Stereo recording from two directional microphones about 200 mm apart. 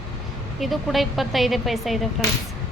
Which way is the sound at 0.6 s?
Centre (ahead or behind).